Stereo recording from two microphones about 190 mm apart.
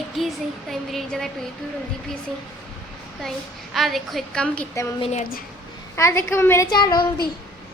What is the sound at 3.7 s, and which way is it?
Speech, centre (ahead or behind).